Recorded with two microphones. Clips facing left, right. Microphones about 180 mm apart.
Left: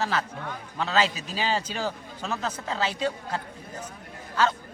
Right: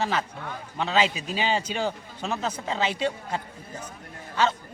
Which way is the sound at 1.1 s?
40° left (ahead or behind).